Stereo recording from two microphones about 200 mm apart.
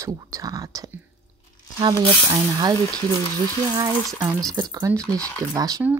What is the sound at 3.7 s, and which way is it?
A woman's voice, 20° right (ahead or behind).